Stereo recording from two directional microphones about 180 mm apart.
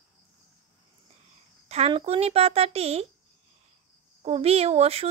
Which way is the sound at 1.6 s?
35° right (ahead or behind).